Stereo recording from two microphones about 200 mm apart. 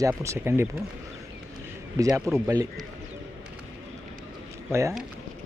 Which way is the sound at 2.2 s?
15° right (ahead or behind).